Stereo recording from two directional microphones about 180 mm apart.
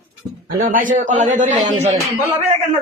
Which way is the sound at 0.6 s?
50° right (ahead or behind).